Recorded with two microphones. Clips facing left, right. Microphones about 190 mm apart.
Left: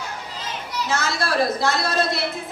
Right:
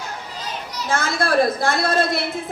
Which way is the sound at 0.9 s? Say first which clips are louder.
Right 4 dB; 50° right (ahead or behind).